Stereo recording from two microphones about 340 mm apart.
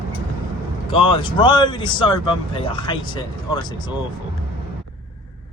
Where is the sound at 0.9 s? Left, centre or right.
Centre.